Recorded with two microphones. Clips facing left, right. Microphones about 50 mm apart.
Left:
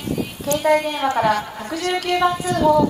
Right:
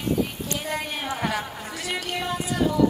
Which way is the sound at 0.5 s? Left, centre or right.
Left.